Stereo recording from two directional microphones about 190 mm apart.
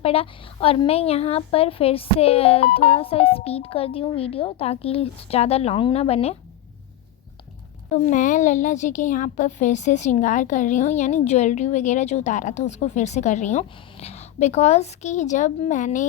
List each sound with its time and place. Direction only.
0.0 s a woman's voice: 30° left (ahead or behind)
7.9 s a woman's voice: 40° left (ahead or behind)